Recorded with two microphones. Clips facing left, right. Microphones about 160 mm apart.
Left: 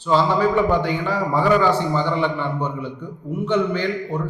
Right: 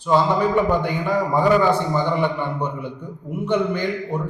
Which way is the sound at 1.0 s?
15° right (ahead or behind).